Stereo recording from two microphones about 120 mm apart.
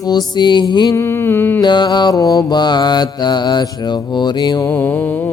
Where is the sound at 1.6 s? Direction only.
40° left (ahead or behind).